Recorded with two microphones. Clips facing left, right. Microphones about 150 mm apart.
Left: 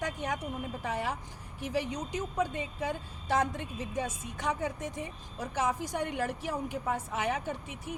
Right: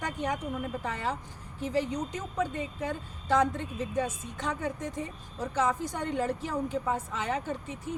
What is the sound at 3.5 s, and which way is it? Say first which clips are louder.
Speech: right 4 dB; 15° left (ahead or behind).